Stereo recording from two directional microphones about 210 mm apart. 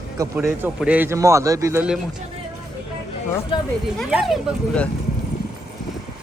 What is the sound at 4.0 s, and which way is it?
Speech, 5° right (ahead or behind).